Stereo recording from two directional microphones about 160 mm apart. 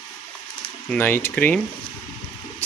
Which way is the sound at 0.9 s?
10° left (ahead or behind).